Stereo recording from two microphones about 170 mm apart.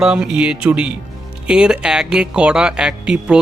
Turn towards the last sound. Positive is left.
turn(degrees=-5)  # may be behind; listen again after turning